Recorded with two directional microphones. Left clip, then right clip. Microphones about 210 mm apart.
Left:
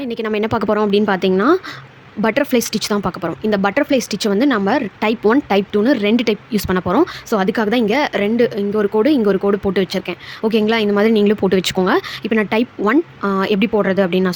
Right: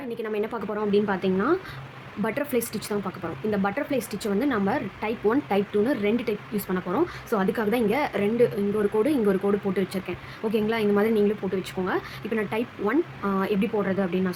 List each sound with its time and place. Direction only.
0.0 s speech: 40° left (ahead or behind)